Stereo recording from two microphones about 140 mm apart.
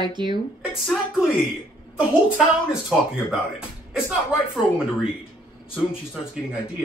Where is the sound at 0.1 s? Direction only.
35° right (ahead or behind).